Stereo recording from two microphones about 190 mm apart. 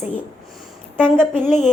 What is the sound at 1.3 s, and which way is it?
Music, 40° left (ahead or behind).